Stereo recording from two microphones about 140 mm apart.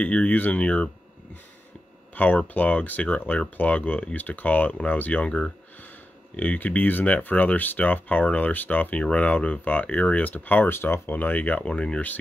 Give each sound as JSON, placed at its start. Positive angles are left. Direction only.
{"t": 0.0, "sound": "speech", "side_deg": 10}
{"t": 2.1, "sound": "speech", "side_deg": 10}